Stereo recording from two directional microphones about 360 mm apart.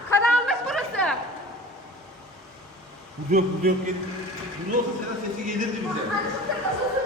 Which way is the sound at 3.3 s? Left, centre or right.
Right.